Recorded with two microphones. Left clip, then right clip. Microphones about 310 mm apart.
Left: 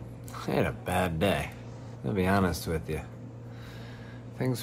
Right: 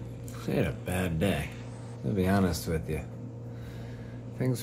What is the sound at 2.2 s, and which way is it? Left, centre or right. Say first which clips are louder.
Speech: left 2 dB; right.